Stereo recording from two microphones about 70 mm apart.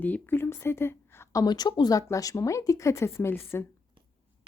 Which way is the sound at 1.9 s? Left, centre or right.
Left.